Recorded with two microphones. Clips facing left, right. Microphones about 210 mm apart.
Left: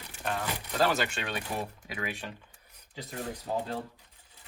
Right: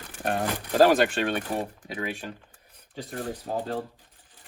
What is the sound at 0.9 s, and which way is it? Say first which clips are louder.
Speech: right 9 dB; 50° right (ahead or behind).